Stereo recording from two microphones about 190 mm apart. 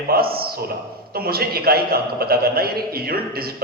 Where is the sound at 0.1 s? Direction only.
55° right (ahead or behind).